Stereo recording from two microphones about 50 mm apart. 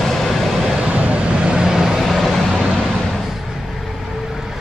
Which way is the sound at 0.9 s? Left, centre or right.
Right.